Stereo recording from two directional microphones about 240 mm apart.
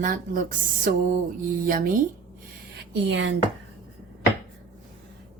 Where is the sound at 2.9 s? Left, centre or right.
Right.